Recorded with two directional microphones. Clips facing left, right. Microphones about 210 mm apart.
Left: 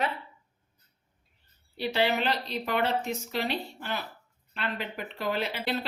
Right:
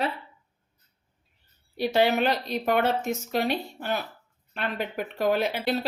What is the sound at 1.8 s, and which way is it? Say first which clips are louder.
Speech: right 5 dB; 45° right (ahead or behind).